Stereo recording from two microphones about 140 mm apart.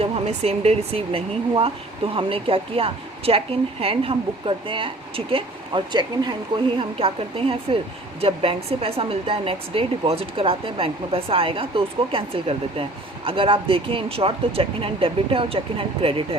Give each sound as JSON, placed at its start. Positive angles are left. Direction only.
{"t": 0.0, "sound": "a woman's voice", "side_deg": -45}